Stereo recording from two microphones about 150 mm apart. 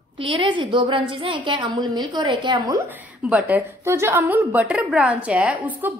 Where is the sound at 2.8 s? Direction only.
10° right (ahead or behind).